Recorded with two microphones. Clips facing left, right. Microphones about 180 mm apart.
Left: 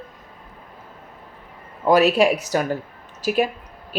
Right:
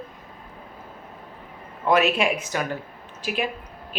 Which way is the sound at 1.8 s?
35° left (ahead or behind).